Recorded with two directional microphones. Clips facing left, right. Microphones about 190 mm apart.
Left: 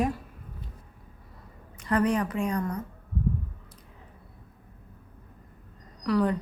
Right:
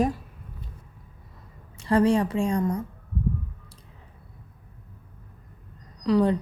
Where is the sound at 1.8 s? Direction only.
30° right (ahead or behind).